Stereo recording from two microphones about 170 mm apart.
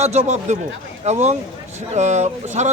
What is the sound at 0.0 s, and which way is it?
A man's voice, 40° right (ahead or behind).